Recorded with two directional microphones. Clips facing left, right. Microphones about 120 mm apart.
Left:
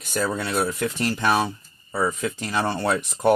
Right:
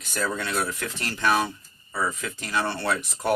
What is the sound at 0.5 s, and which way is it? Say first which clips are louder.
Speech: left 5 dB; 20° left (ahead or behind).